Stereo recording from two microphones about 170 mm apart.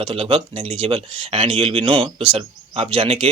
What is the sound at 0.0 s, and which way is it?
Speech, 30° right (ahead or behind).